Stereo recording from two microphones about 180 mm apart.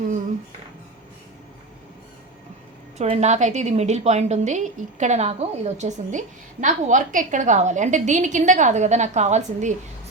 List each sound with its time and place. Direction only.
3.0 s a woman's voice: 40° right (ahead or behind)